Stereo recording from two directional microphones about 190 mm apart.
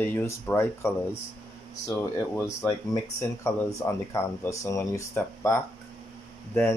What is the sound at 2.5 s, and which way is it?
Speech, 15° left (ahead or behind).